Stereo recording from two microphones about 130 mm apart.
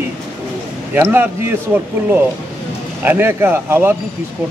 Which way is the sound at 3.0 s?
15° right (ahead or behind).